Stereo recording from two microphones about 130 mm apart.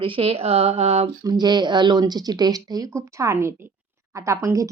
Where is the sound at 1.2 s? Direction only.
35° right (ahead or behind).